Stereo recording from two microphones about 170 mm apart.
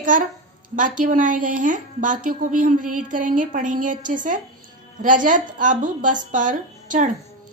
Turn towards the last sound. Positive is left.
turn(degrees=-45)  # may be behind; listen again after turning